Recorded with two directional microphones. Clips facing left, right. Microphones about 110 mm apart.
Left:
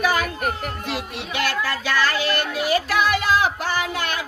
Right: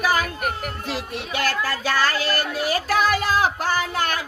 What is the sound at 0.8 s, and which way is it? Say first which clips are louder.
Speech: even; 40° right (ahead or behind).